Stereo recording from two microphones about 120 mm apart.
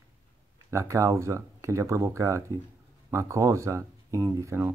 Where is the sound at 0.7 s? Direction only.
25° right (ahead or behind).